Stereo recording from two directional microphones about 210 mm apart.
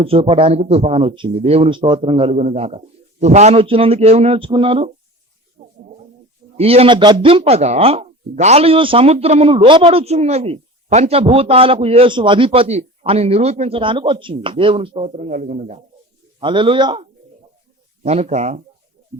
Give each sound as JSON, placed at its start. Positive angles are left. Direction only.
{"t": 0.0, "sound": "speech", "side_deg": -25}
{"t": 5.6, "sound": "a sound", "side_deg": -35}
{"t": 6.6, "sound": "speech", "side_deg": -30}
{"t": 16.4, "sound": "speech", "side_deg": -25}
{"t": 18.0, "sound": "speech", "side_deg": -30}